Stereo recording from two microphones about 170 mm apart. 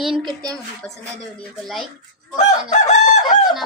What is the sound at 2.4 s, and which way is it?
Chicken, 45° left (ahead or behind).